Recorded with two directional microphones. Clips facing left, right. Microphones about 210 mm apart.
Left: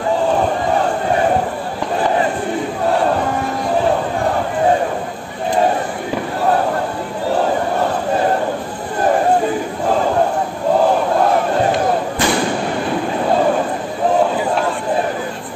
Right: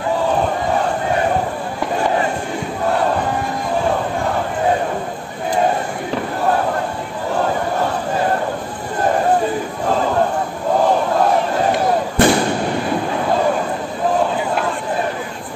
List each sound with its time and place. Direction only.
12.2 s thump: 55° right (ahead or behind)